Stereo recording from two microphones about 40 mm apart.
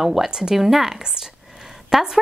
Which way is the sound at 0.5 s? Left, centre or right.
Centre.